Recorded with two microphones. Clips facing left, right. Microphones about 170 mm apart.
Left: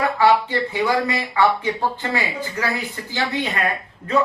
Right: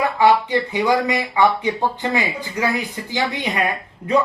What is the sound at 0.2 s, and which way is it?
Speech, 20° right (ahead or behind).